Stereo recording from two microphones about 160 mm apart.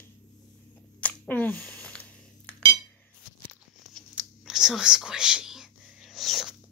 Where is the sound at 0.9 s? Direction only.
10° left (ahead or behind).